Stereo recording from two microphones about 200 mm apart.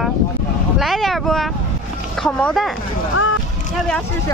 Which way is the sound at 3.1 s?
90° left.